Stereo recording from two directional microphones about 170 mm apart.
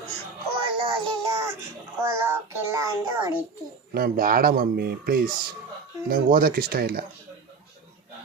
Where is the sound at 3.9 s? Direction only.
60° right (ahead or behind).